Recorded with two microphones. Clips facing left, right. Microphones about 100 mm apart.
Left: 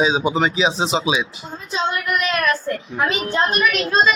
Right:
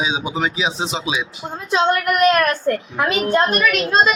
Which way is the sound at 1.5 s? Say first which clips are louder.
Right 11 dB; 65° right (ahead or behind).